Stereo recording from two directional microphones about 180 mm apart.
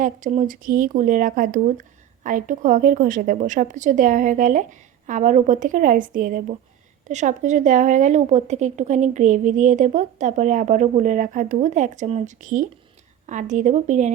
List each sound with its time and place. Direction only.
0.0 s speech: 45° right (ahead or behind)